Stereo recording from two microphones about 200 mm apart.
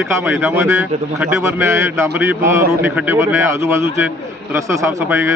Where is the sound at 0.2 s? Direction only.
10° right (ahead or behind).